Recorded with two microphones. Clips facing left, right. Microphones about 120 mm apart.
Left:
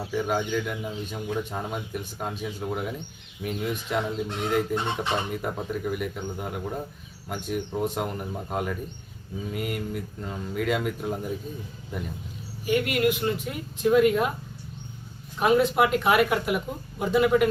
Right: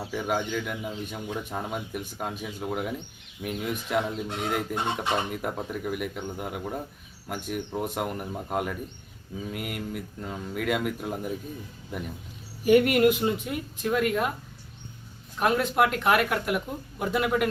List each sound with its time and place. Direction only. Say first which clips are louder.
0.1 s speech: left 2 dB; centre (ahead or behind)
12.6 s speech: right 6 dB; 60° right (ahead or behind)
13.4 s speech: left 4 dB; centre (ahead or behind)
15.4 s speech: left 3 dB; centre (ahead or behind)